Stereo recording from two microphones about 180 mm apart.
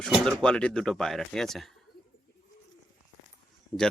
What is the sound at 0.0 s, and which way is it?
Speech, 5° left (ahead or behind).